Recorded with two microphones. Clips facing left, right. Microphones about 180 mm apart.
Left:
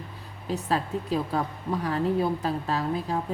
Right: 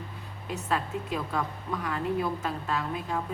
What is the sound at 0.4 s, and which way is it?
A woman's voice, 35° left (ahead or behind).